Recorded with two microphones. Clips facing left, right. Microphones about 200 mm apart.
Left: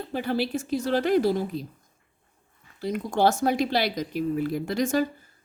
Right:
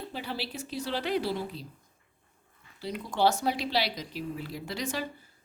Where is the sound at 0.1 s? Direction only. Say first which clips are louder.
Left 15 dB; 50° left (ahead or behind).